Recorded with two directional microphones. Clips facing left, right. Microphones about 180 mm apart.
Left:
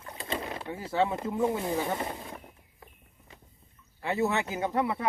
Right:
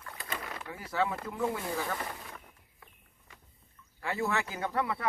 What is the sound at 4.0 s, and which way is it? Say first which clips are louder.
Speech: left 4 dB; 20° left (ahead or behind).